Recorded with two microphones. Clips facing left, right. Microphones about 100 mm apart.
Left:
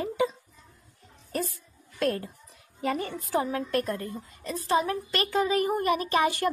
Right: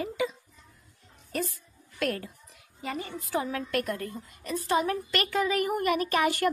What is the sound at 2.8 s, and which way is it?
Speech, 55° left (ahead or behind).